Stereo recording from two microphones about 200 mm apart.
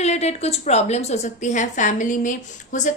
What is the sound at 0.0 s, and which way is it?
A woman's voice, 35° left (ahead or behind).